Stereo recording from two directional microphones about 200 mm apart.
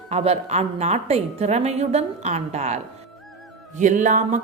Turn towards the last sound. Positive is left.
turn(degrees=-40)  # may be behind; listen again after turning